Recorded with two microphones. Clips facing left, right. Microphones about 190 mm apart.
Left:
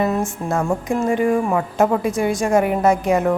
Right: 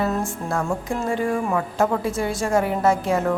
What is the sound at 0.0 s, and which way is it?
A woman's voice, 20° left (ahead or behind).